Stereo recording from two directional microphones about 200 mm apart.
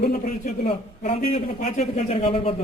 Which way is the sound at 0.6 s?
30° left (ahead or behind).